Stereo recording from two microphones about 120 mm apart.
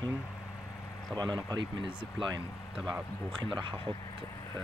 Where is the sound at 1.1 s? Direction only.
35° right (ahead or behind).